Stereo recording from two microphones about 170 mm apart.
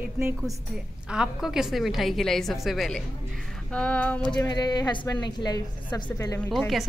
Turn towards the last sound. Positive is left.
turn(degrees=0)  # may be behind; listen again after turning